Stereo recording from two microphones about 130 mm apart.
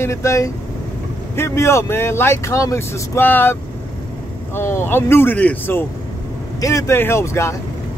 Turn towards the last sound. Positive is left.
turn(degrees=20)  # may be behind; listen again after turning